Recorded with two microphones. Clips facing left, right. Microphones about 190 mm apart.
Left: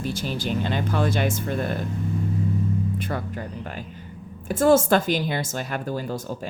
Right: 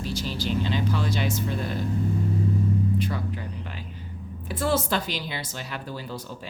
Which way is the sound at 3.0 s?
55° left (ahead or behind).